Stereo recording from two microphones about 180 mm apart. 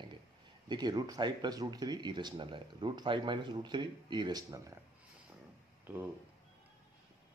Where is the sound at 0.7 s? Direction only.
25° right (ahead or behind).